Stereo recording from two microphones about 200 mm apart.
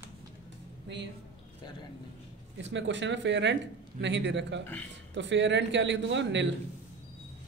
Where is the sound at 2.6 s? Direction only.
65° right (ahead or behind).